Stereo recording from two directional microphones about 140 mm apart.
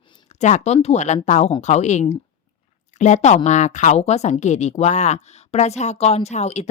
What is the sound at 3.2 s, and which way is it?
Speech, 55° left (ahead or behind).